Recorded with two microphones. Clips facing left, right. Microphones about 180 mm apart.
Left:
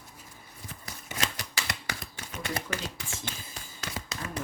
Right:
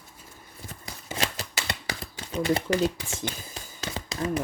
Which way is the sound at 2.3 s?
30° right (ahead or behind).